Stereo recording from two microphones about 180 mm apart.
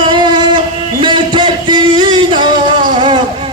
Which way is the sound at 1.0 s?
25° right (ahead or behind).